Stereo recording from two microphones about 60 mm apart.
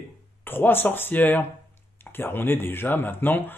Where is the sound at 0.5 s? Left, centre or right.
Left.